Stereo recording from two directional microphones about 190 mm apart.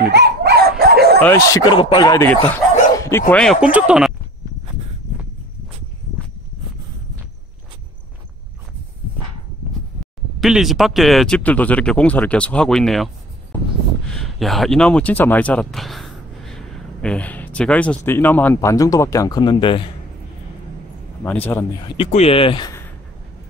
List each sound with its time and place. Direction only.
0.1 s dog: 60° right (ahead or behind)
1.2 s a man's voice: 10° left (ahead or behind)
1.8 s speech: 25° left (ahead or behind); by 3.5 s 5° left (ahead or behind)
3.6 s speech: 5° right (ahead or behind)
10.4 s speech: centre (ahead or behind)
14.1 s speech: centre (ahead or behind); by 19.9 s 25° left (ahead or behind)
21.2 s a man's voice: 10° left (ahead or behind)
21.8 s speech: 30° left (ahead or behind)